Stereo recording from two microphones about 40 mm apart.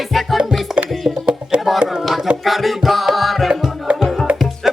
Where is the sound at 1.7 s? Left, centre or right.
Centre.